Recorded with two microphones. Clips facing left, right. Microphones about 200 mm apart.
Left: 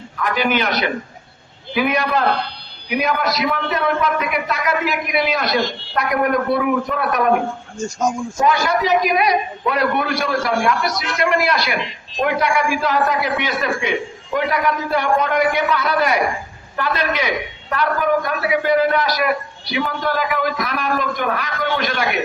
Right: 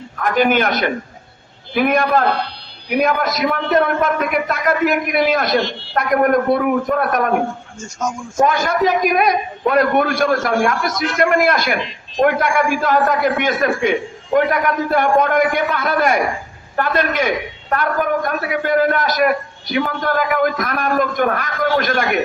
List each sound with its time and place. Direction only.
0.2 s a man's voice: 50° right (ahead or behind)
7.8 s speech: 35° left (ahead or behind)
8.4 s a man's voice: 50° right (ahead or behind)